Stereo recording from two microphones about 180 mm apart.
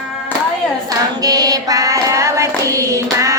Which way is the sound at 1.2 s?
20° right (ahead or behind).